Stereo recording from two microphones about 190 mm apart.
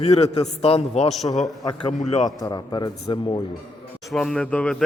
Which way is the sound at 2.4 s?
20° left (ahead or behind).